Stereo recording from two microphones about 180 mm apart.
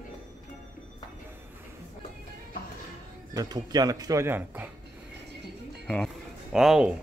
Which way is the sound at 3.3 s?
20° right (ahead or behind).